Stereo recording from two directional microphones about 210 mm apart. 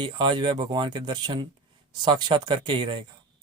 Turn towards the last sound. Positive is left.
turn(degrees=-25)  # may be behind; listen again after turning